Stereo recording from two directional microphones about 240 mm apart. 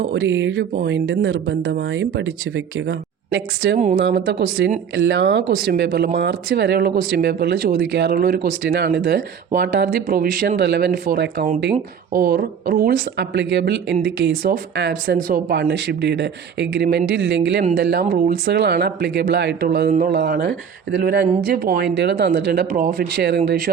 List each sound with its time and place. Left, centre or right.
0.1 s speech: right
3.8 s speech: right
4.1 s speech: right